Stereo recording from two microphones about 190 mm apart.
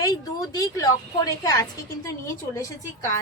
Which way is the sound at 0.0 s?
20° left (ahead or behind).